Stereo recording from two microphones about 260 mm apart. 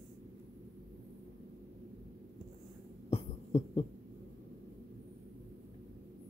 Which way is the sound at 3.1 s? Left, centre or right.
Left.